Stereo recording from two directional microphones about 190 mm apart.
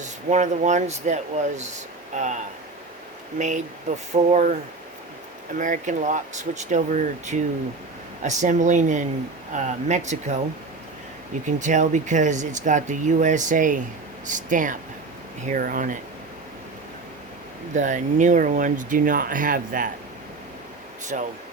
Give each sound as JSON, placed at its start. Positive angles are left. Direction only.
{"t": 0.0, "sound": "speech", "side_deg": -40}
{"t": 5.5, "sound": "speech", "side_deg": -45}
{"t": 11.4, "sound": "speech", "side_deg": -40}
{"t": 17.7, "sound": "speech", "side_deg": -40}
{"t": 21.1, "sound": "speech", "side_deg": -40}